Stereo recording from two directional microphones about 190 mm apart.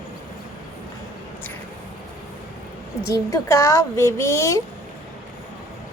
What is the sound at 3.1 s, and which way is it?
A woman's voice, 15° left (ahead or behind).